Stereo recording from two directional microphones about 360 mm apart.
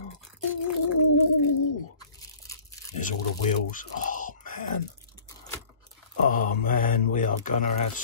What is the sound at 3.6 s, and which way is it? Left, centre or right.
Speech, left.